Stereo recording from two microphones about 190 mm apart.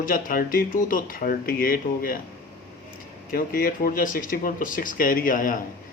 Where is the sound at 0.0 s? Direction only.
50° left (ahead or behind).